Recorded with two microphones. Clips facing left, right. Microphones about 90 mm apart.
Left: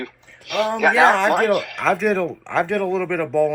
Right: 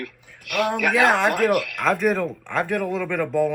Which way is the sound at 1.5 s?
25° left (ahead or behind).